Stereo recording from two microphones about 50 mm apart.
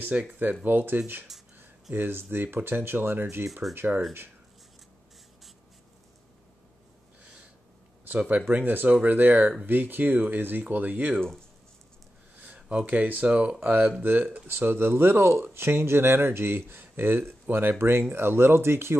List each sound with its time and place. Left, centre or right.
0.0 s speech: right
0.7 s speech: right
8.3 s speech: right
11.1 s speech: centre
12.4 s speech: right
14.5 s speech: right